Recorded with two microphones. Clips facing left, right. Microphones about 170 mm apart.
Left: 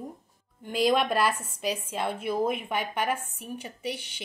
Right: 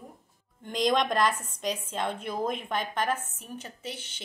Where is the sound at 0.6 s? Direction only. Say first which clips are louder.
Left 2 dB; 5° left (ahead or behind).